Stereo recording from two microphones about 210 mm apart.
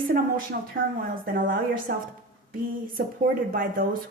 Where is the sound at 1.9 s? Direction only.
45° right (ahead or behind).